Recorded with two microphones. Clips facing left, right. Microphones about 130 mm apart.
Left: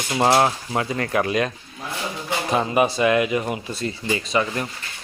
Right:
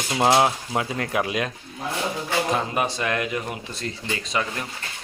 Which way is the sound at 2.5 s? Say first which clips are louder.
Left 6 dB; 5° left (ahead or behind).